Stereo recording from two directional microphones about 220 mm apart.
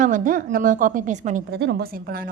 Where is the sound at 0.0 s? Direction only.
35° right (ahead or behind).